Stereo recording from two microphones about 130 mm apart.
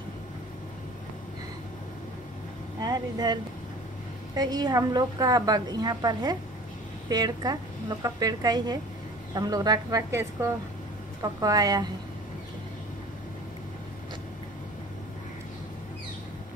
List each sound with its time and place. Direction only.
2.8 s speech: 30° right (ahead or behind)
4.4 s a woman's voice: 30° right (ahead or behind)